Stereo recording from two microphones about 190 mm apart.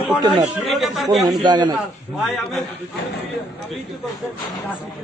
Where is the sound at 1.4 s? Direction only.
25° right (ahead or behind).